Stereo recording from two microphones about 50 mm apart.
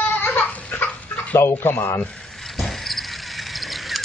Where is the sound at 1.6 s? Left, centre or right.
Left.